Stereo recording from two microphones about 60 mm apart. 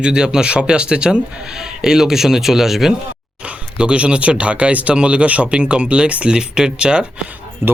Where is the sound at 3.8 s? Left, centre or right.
Centre.